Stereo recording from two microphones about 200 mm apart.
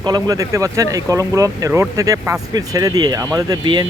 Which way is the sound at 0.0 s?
20° right (ahead or behind).